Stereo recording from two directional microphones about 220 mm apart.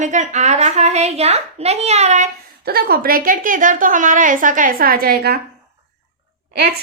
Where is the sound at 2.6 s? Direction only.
45° right (ahead or behind).